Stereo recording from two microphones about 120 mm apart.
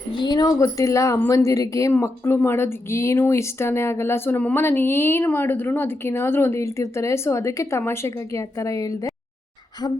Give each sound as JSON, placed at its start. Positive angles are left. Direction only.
{"t": 0.1, "sound": "speech", "side_deg": 40}